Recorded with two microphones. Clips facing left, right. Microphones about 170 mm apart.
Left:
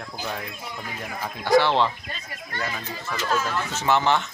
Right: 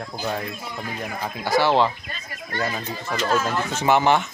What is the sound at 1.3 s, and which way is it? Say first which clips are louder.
Speech: even; 5° right (ahead or behind).